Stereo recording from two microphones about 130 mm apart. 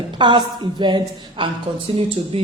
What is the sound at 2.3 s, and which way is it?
Speech, 50° right (ahead or behind).